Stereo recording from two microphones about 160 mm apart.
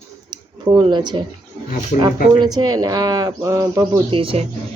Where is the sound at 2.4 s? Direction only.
25° right (ahead or behind).